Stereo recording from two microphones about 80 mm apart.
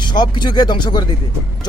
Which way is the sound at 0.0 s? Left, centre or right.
Left.